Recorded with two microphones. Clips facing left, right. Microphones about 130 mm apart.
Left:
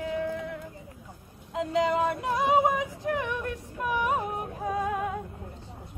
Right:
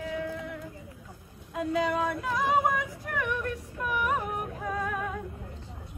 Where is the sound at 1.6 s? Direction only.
20° left (ahead or behind).